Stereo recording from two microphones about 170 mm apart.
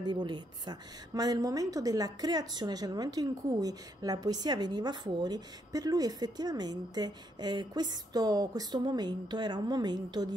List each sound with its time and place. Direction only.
0.0 s a woman's voice: 25° right (ahead or behind)